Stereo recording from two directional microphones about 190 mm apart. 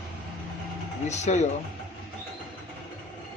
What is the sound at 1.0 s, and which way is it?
Speech, 35° left (ahead or behind).